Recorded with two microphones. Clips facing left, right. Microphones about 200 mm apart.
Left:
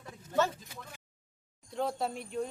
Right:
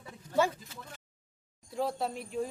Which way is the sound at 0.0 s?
10° right (ahead or behind).